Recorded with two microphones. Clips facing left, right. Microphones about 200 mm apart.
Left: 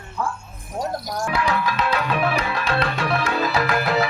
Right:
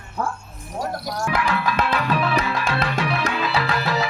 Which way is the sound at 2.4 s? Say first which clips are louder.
Even; 50° right (ahead or behind).